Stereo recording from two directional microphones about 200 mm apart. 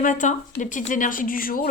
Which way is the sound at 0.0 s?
40° left (ahead or behind).